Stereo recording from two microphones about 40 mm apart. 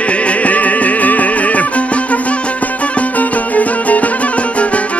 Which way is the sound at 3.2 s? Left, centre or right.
Left.